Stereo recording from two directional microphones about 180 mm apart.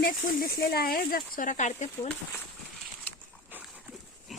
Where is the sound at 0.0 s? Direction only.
55° left (ahead or behind).